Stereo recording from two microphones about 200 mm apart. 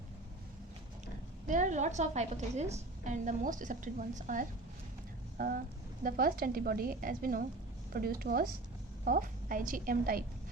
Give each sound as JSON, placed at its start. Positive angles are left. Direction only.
{"t": 1.5, "sound": "a woman's voice", "side_deg": -40}
{"t": 6.0, "sound": "a woman's voice", "side_deg": -45}